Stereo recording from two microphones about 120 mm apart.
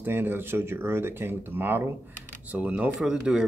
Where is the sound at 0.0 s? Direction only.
20° right (ahead or behind).